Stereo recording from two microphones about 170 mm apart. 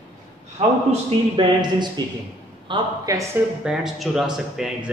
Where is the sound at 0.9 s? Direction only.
30° right (ahead or behind).